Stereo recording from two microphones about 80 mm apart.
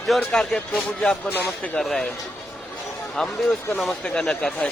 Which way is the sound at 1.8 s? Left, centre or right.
Centre.